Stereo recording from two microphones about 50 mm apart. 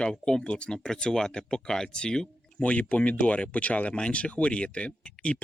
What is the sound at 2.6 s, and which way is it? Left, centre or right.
Speech, left.